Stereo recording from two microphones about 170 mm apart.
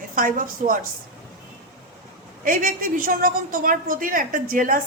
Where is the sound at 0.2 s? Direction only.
55° right (ahead or behind).